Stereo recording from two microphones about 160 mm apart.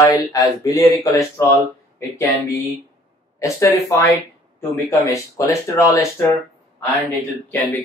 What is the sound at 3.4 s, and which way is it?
Speech, 20° left (ahead or behind).